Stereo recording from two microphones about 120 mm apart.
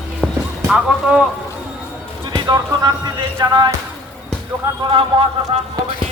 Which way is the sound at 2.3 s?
35° right (ahead or behind).